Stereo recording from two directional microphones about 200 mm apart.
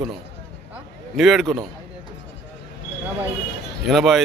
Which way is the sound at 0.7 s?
Centre (ahead or behind).